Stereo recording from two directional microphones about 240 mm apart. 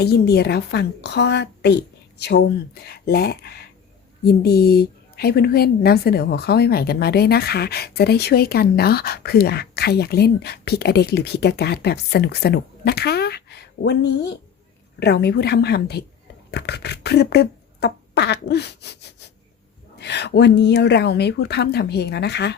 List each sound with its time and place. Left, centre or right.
0.0 s a woman's voice: left
20.0 s a woman's voice: left